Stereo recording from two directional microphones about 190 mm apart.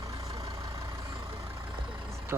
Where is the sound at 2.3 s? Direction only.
15° right (ahead or behind).